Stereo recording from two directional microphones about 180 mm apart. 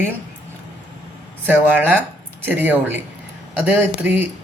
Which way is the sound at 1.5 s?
10° right (ahead or behind).